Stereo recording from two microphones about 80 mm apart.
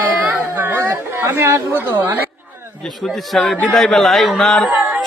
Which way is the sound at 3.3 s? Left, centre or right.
Centre.